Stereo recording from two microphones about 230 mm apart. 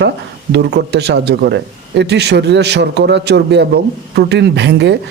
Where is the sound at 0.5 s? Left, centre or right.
Right.